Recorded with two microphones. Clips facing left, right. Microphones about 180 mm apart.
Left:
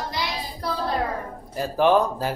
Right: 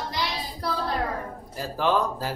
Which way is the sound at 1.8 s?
15° left (ahead or behind).